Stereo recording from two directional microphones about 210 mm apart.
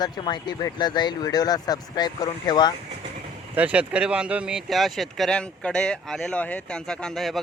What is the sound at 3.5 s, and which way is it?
Speech, 5° right (ahead or behind).